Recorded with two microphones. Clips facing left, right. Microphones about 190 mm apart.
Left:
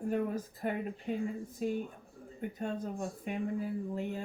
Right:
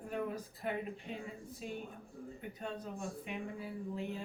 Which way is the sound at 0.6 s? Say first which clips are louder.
Left 4 dB; 50° left (ahead or behind).